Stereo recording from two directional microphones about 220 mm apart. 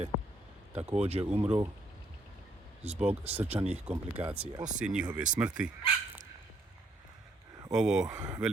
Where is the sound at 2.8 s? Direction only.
30° right (ahead or behind).